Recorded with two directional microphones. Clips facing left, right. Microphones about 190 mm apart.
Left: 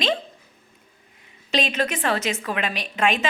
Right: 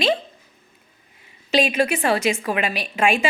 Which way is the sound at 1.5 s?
10° right (ahead or behind).